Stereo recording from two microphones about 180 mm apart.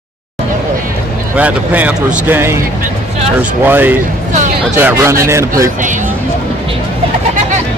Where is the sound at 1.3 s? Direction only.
10° right (ahead or behind).